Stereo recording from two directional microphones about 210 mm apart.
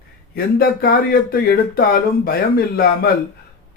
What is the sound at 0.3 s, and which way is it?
Speech, 45° left (ahead or behind).